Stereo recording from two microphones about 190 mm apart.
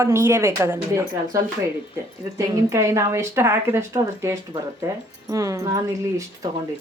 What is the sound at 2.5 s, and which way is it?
Speech, 15° right (ahead or behind).